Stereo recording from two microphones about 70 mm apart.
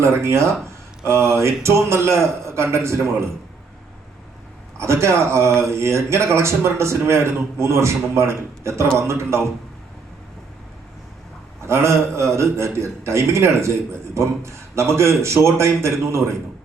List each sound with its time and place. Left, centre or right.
0.0 s a man's voice: right
4.8 s a man's voice: right
11.6 s a man's voice: right